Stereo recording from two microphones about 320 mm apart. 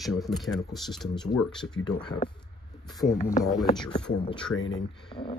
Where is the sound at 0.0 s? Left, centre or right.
Centre.